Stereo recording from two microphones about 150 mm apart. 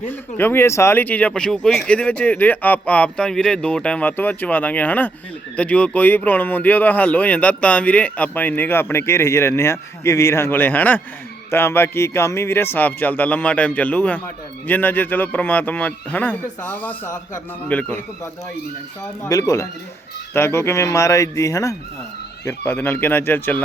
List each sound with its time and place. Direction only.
0.1 s speech: 15° left (ahead or behind)
19.2 s speech: 20° left (ahead or behind)